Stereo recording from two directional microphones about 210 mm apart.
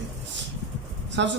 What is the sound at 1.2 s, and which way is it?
Speech, 60° right (ahead or behind).